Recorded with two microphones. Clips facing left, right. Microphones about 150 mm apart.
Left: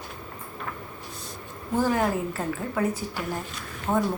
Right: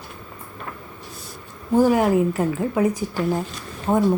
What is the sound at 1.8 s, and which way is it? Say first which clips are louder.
Speech: right 7 dB; 15° right (ahead or behind).